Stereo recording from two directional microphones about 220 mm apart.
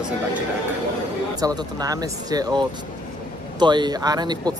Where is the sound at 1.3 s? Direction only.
15° right (ahead or behind).